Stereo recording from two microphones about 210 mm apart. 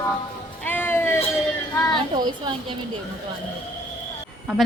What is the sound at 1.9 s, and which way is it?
Speech, 20° right (ahead or behind).